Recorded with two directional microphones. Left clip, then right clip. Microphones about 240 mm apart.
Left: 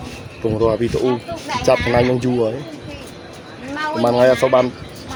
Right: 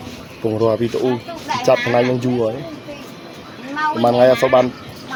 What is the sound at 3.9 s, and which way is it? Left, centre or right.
Speech, centre.